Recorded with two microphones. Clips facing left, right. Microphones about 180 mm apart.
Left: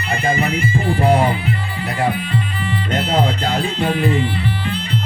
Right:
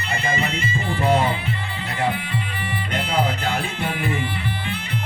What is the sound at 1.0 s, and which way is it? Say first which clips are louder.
Music: left 3 dB; 15° left (ahead or behind).